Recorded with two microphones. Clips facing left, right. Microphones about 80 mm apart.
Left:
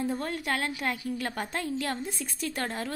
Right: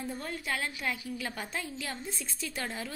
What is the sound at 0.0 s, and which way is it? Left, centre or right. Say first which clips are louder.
A woman's voice: left 6 dB; left.